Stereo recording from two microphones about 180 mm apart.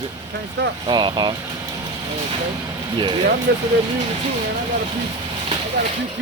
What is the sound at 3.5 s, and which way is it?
Speech, 70° right (ahead or behind).